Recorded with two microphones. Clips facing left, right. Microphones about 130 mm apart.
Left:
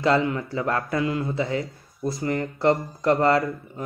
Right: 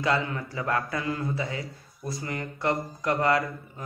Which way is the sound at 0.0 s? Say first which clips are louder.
Left 6 dB; 25° left (ahead or behind).